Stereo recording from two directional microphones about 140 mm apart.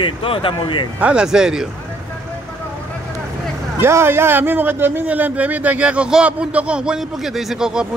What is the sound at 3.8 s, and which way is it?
A man's voice, 15° right (ahead or behind).